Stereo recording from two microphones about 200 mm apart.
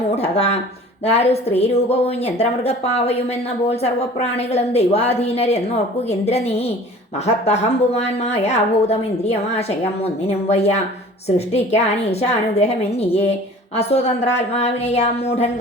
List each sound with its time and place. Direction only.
0.2 s a woman's voice: 30° left (ahead or behind)